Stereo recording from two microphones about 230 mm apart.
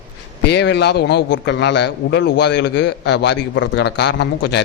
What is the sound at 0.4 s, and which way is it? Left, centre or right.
A man's voice, left.